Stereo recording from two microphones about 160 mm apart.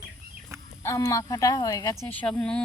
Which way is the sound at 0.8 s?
20° left (ahead or behind).